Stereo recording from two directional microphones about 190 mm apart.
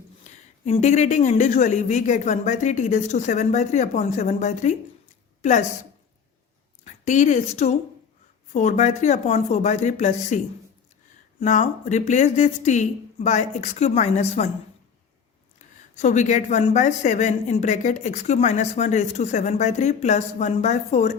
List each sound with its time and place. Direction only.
0.3 s a woman's voice: 35° left (ahead or behind)
6.8 s a woman's voice: 40° left (ahead or behind)
16.0 s a woman's voice: 40° left (ahead or behind)